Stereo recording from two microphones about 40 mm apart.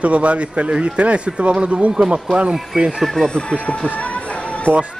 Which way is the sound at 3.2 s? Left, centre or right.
Left.